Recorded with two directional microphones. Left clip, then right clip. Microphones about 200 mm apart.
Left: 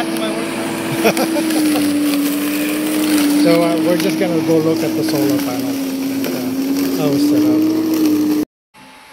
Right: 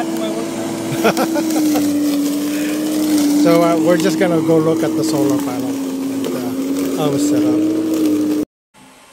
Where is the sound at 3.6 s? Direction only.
20° right (ahead or behind).